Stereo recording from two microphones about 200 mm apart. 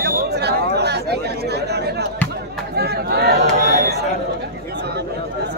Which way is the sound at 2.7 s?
50° right (ahead or behind).